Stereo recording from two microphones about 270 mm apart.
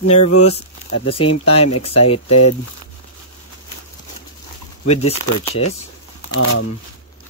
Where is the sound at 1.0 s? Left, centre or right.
Left.